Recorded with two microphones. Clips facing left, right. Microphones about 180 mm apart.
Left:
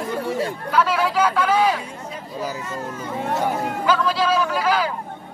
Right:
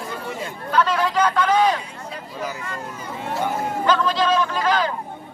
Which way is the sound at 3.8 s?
5° left (ahead or behind).